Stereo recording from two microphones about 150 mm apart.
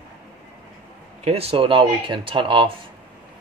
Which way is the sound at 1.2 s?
40° right (ahead or behind).